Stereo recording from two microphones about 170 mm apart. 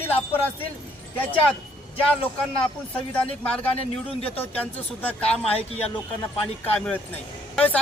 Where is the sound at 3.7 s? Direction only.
35° left (ahead or behind).